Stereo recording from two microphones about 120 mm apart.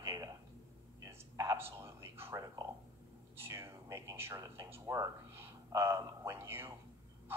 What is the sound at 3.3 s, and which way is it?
A man's voice, 20° right (ahead or behind).